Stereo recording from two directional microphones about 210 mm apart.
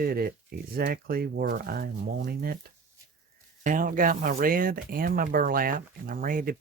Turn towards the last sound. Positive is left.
turn(degrees=-40)  # may be behind; listen again after turning